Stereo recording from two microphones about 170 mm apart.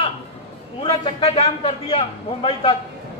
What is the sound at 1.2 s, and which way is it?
A man's voice, 40° left (ahead or behind).